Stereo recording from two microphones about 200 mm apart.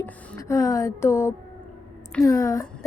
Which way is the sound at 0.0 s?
15° left (ahead or behind).